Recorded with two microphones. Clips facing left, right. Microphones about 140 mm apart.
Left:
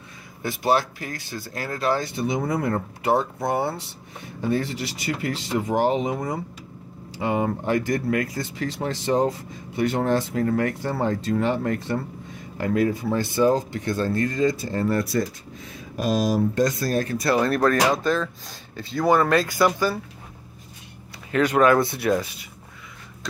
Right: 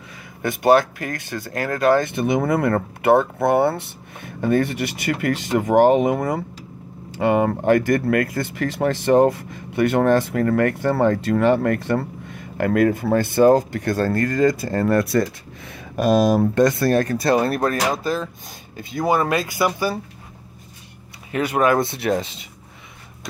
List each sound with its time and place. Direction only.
0.4 s speech: 55° right (ahead or behind)
17.7 s speech: 5° right (ahead or behind)
21.3 s speech: 15° right (ahead or behind)